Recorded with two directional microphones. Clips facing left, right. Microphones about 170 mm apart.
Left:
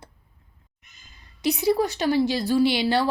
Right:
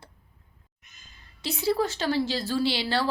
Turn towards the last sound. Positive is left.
turn(degrees=15)  # may be behind; listen again after turning